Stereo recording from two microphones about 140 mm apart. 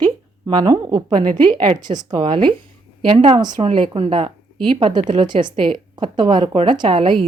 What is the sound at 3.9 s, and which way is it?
A woman's voice, 40° right (ahead or behind).